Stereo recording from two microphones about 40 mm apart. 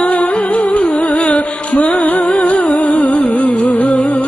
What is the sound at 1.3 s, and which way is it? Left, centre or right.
Music, left.